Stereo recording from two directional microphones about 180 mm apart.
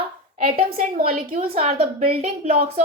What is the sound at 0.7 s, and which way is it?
Speech, 55° right (ahead or behind).